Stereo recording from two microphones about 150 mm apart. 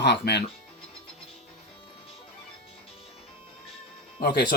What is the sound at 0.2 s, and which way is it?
Speech, 90° left.